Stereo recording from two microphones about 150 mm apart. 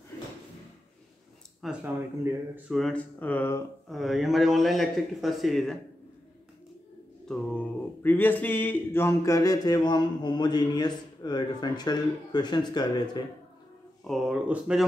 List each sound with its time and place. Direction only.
1.6 s speech: centre (ahead or behind)
2.0 s speech: 15° right (ahead or behind)
2.7 s speech: 5° left (ahead or behind)
3.9 s speech: centre (ahead or behind)
7.2 s a sound: 5° left (ahead or behind); by 13.2 s 30° left (ahead or behind)
14.0 s speech: centre (ahead or behind)